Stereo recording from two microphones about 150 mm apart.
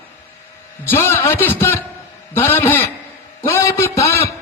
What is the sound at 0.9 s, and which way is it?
A man's voice, 15° left (ahead or behind).